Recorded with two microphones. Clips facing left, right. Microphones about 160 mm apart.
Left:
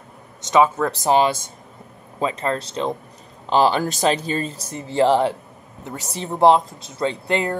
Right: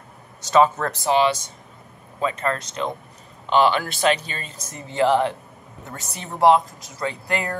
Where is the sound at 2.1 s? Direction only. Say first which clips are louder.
Left 1 dB; 30° left (ahead or behind).